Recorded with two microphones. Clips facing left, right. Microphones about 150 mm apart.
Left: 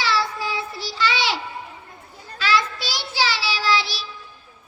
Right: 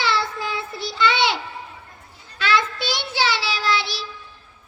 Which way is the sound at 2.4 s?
20° right (ahead or behind).